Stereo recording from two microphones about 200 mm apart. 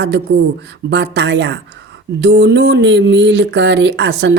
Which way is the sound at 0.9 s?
60° right (ahead or behind).